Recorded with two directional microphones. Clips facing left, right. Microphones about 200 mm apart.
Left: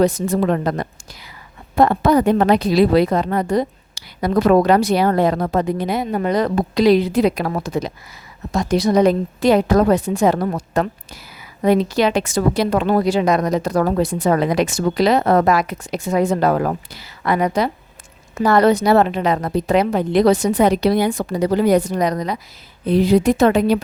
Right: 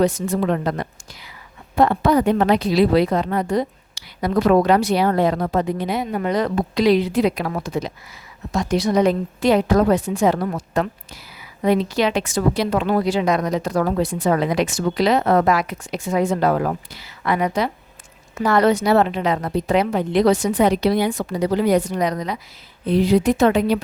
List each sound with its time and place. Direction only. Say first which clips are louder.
0.0 s a woman's voice: left 2 dB; 40° left (ahead or behind)